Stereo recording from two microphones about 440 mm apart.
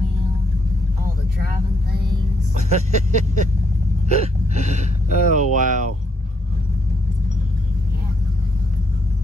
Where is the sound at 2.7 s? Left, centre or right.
Centre.